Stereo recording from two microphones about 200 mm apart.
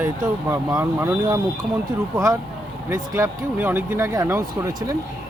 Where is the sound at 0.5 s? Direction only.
10° right (ahead or behind).